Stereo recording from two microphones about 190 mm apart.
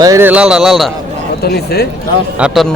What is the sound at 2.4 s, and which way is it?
Speech, centre (ahead or behind).